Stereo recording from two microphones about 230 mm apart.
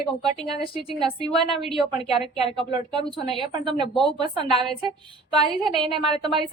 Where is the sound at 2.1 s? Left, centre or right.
Left.